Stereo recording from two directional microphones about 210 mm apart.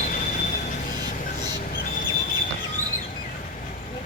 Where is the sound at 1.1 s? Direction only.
40° left (ahead or behind).